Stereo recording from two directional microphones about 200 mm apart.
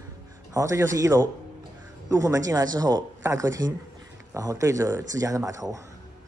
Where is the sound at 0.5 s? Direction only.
15° right (ahead or behind).